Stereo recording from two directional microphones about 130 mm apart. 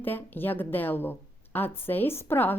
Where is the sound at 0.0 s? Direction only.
15° left (ahead or behind).